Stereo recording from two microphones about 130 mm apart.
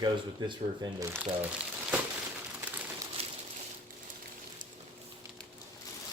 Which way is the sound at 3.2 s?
50° right (ahead or behind).